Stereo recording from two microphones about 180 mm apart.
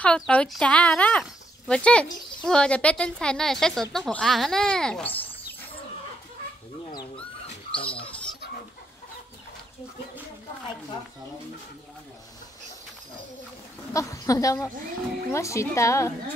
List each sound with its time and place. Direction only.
0.0 s a woman's voice: 5° left (ahead or behind)
7.4 s rodents: 30° left (ahead or behind)
13.9 s a woman's voice: 20° left (ahead or behind)